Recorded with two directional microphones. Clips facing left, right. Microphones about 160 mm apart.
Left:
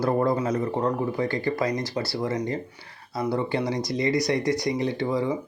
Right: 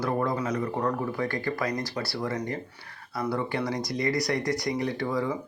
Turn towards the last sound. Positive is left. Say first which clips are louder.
# left 3 dB
turn(degrees=25)  # may be behind; listen again after turning